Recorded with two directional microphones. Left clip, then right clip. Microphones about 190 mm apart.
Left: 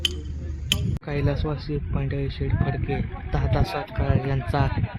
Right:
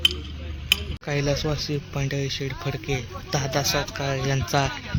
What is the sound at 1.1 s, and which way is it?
Speech, 5° right (ahead or behind).